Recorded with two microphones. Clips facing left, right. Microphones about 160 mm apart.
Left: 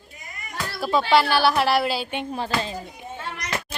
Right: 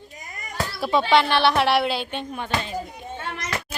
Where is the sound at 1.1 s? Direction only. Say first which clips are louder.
Even; 5° left (ahead or behind).